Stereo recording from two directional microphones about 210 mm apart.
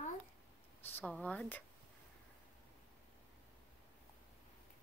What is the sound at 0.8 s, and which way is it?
Speech, 5° left (ahead or behind).